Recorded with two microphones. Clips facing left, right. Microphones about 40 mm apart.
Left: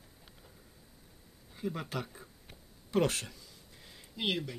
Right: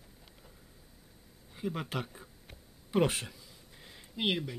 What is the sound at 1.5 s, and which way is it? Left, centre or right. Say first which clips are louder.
Speech: right 1 dB; centre.